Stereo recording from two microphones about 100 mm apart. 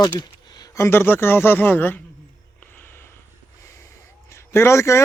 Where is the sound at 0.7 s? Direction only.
25° left (ahead or behind).